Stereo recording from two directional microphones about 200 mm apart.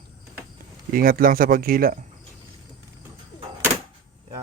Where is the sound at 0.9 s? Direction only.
45° right (ahead or behind).